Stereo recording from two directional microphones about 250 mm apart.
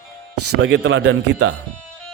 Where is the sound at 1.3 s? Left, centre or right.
Right.